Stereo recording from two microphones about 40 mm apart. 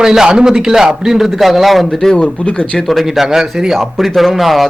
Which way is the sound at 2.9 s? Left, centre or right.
Centre.